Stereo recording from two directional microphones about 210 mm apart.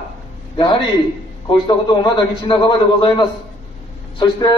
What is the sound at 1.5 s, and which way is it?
A man's voice, 20° left (ahead or behind).